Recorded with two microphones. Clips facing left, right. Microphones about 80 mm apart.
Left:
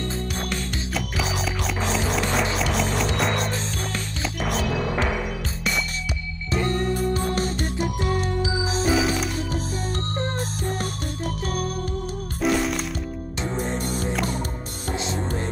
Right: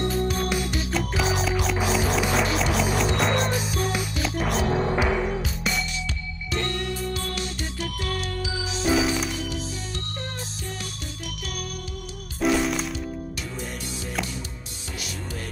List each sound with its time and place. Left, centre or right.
0.9 s music: centre
4.6 s music: right
6.5 s music: left
8.8 s music: centre
12.4 s music: centre